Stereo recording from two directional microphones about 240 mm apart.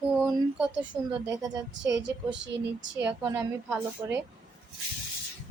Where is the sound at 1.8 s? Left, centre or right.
Right.